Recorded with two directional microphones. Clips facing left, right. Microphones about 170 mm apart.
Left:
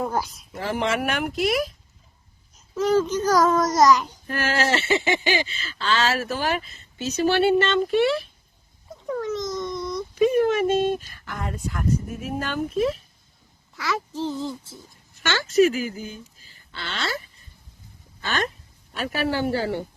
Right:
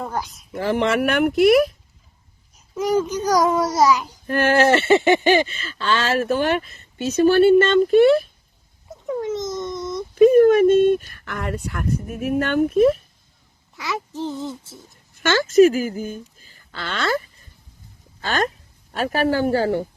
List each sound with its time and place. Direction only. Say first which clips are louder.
0.0 s speech: left 2 dB; 5° left (ahead or behind)
0.5 s speech: right 5 dB; 55° right (ahead or behind)
2.7 s a child's voice: even; 15° right (ahead or behind)
4.3 s speech: right 8 dB; 55° right (ahead or behind)
8.9 s a sound: right 2 dB; 20° right (ahead or behind)
9.6 s whimper: right 1 dB; 20° right (ahead or behind)
10.2 s speech: right 8 dB; 50° right (ahead or behind)
13.7 s speech: even; 20° right (ahead or behind)
15.1 s speech: right 6 dB; 50° right (ahead or behind)
18.3 s speech: right 4 dB; 40° right (ahead or behind)